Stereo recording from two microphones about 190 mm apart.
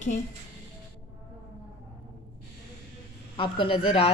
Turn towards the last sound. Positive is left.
turn(degrees=30)  # may be behind; listen again after turning